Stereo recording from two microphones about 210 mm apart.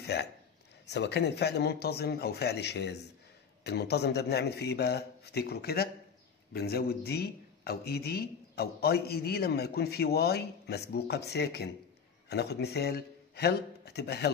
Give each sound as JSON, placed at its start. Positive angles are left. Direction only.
{"t": 0.0, "sound": "a man's voice", "side_deg": 50}